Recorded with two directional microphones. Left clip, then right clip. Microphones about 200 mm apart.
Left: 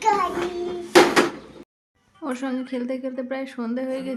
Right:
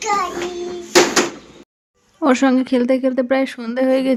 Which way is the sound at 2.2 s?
45° right (ahead or behind).